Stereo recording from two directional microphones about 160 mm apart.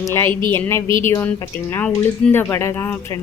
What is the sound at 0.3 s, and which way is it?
Speech, 30° right (ahead or behind).